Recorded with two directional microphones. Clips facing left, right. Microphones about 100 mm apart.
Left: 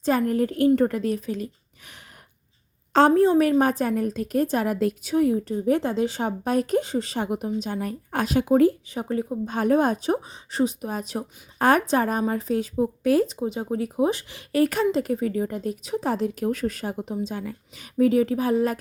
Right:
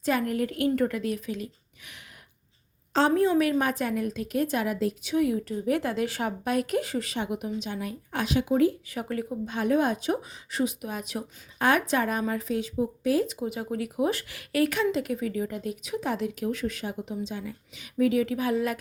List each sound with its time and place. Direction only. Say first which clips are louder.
0.0 s speech: left 4 dB; 35° left (ahead or behind)
3.2 s speech: left 5 dB; 35° left (ahead or behind)
5.1 s speech: left 4 dB; 35° left (ahead or behind)
8.9 s speech: left 4 dB; 25° left (ahead or behind)
9.5 s speech: left 4 dB; 40° left (ahead or behind)
13.2 s speech: left 4 dB; 30° left (ahead or behind)